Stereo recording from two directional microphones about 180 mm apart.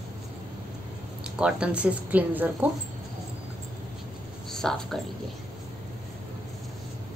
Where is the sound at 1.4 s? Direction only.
5° right (ahead or behind).